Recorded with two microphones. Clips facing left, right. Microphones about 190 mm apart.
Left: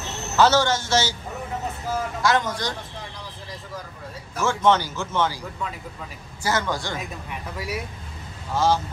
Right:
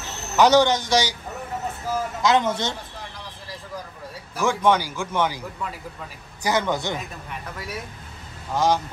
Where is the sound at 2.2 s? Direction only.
20° right (ahead or behind).